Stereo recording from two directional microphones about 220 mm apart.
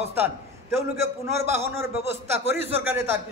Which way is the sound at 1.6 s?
10° right (ahead or behind).